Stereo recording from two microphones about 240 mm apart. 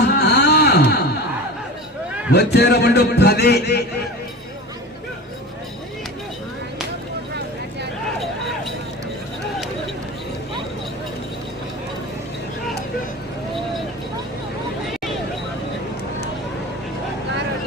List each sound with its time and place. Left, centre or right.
0.2 s music: left
2.3 s a man's voice: left